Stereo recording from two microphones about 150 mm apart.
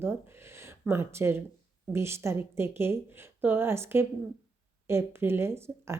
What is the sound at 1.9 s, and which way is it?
Speech, 15° right (ahead or behind).